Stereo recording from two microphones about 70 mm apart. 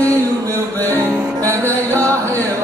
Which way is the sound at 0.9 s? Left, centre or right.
Right.